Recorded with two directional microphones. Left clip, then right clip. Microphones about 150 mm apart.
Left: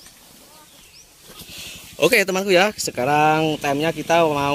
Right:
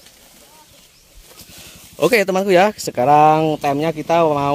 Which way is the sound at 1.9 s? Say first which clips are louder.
Right 2 dB; 75° right (ahead or behind).